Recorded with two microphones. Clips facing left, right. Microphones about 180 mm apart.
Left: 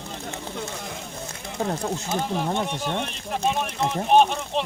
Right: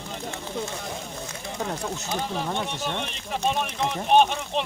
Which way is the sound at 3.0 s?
5° left (ahead or behind).